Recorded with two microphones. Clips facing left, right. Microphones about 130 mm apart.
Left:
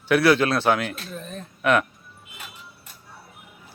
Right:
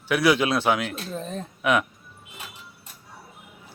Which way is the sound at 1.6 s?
5° right (ahead or behind).